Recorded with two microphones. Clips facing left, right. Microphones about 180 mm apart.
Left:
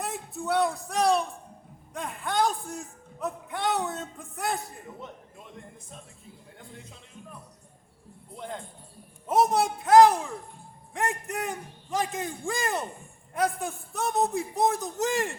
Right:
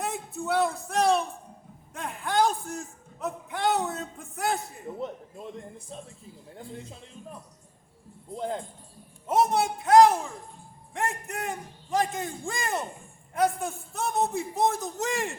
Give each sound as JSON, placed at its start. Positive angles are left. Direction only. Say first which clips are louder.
{"t": 0.0, "sound": "a sound", "louder": "right 1 dB", "side_deg": 0}
{"t": 1.9, "sound": "a man's voice", "louder": "right 1 dB", "side_deg": 0}
{"t": 8.4, "sound": "a man's voice", "louder": "right 6 dB", "side_deg": -30}
{"t": 9.2, "sound": "a man's voice", "louder": "left 1 dB", "side_deg": 0}